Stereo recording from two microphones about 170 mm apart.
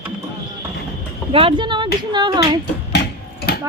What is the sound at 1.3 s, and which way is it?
Speech, 30° right (ahead or behind).